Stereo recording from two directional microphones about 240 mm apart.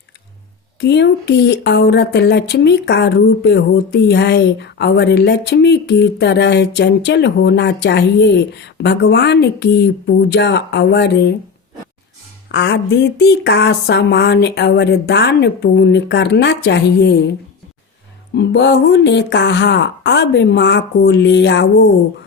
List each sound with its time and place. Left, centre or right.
0.8 s speech: left
12.5 s speech: left
18.3 s speech: left